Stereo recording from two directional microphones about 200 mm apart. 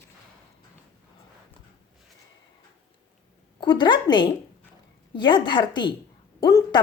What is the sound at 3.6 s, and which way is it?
A woman's voice, 20° left (ahead or behind).